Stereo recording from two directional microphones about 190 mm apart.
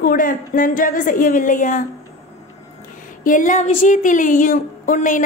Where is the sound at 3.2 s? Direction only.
45° left (ahead or behind).